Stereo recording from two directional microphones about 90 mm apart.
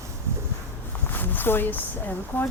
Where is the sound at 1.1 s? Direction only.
20° left (ahead or behind).